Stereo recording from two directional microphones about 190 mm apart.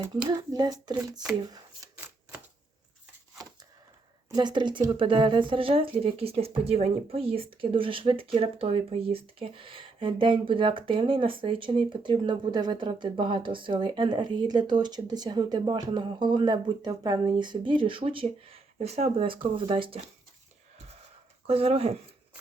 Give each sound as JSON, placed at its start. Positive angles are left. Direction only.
{"t": 0.3, "sound": "speech", "side_deg": -20}
{"t": 4.3, "sound": "speech", "side_deg": -25}
{"t": 21.4, "sound": "speech", "side_deg": -30}